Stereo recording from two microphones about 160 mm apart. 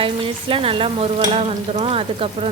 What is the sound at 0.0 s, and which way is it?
Speech, 35° right (ahead or behind).